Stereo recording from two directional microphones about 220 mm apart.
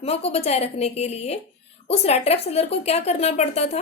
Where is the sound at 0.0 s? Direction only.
25° left (ahead or behind).